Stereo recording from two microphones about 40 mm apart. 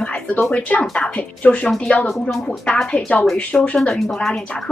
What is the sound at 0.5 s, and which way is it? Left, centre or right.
A woman's voice, left.